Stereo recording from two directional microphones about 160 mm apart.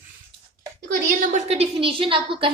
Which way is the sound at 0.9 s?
55° right (ahead or behind).